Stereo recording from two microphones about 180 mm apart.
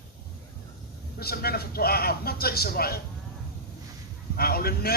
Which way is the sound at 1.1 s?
60° left (ahead or behind).